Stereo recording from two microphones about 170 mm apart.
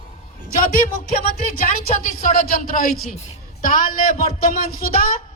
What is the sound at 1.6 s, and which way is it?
A woman's voice, 50° left (ahead or behind).